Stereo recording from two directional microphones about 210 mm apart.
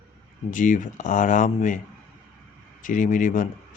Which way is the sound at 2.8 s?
40° left (ahead or behind).